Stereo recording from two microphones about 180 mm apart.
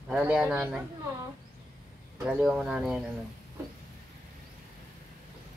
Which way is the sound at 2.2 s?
5° right (ahead or behind).